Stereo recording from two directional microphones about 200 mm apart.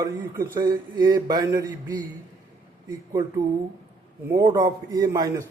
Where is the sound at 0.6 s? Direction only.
20° right (ahead or behind).